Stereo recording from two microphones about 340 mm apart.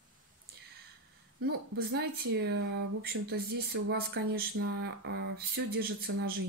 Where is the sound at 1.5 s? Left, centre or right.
Right.